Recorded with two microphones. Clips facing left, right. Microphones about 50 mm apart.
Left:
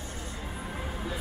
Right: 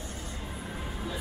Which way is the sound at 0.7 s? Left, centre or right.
Centre.